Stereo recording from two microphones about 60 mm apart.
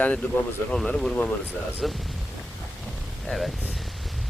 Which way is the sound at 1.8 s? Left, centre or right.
Centre.